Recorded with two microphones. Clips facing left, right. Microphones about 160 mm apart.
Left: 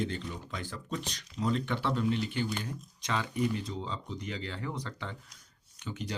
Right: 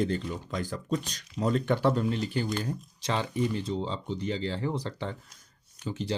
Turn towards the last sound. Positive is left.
turn(degrees=-30)  # may be behind; listen again after turning